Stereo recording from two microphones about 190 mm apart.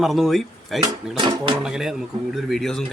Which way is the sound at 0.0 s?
Centre (ahead or behind).